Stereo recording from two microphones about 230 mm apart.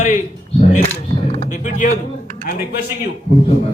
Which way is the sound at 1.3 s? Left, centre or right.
Left.